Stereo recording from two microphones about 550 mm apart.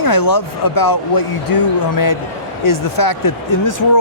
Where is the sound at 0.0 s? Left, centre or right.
Left.